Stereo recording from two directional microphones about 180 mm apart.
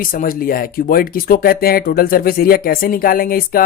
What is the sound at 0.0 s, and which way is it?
Speech, 50° left (ahead or behind).